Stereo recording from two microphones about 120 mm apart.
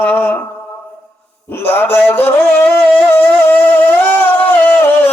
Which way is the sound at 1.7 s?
20° left (ahead or behind).